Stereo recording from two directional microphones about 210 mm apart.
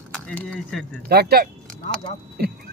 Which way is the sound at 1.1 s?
50° right (ahead or behind).